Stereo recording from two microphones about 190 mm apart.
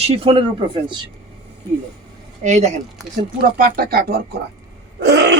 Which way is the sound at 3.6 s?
50° right (ahead or behind).